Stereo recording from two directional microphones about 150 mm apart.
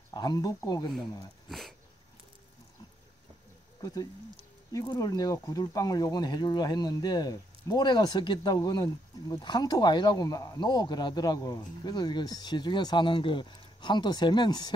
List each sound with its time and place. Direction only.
0.1 s speech: 25° left (ahead or behind)
1.5 s a sound: centre (ahead or behind)
3.8 s speech: 25° left (ahead or behind)